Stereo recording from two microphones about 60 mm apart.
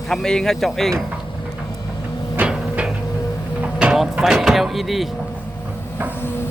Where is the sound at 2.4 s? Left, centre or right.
Right.